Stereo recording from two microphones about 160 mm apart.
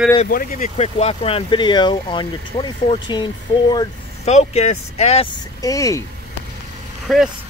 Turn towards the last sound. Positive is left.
turn(degrees=-5)  # may be behind; listen again after turning